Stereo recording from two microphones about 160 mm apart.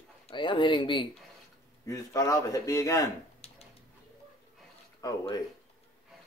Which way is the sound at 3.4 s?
40° left (ahead or behind).